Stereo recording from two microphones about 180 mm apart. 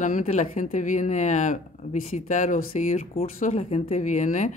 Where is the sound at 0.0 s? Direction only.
45° left (ahead or behind).